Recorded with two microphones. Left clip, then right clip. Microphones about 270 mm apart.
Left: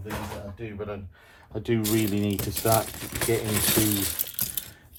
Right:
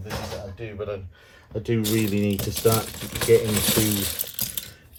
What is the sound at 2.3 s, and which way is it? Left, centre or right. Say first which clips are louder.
Speech: right 4 dB; centre.